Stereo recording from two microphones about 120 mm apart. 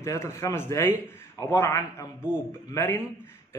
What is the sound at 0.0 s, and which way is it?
A man's voice, 25° left (ahead or behind).